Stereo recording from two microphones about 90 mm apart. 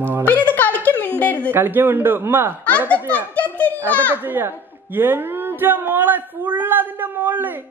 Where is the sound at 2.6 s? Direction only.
15° left (ahead or behind).